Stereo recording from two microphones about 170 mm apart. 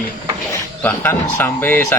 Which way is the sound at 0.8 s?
10° left (ahead or behind).